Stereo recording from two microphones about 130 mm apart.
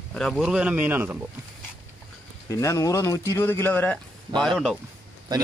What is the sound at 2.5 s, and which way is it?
Speech, 25° left (ahead or behind).